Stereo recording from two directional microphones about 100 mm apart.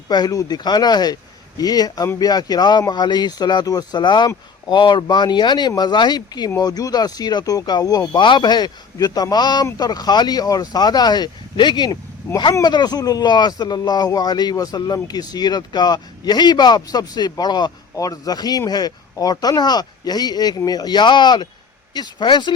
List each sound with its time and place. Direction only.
0.1 s speech: 40° left (ahead or behind)